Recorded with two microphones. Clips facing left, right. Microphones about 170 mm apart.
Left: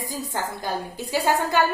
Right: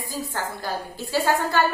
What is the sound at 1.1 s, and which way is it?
Speech, 15° left (ahead or behind).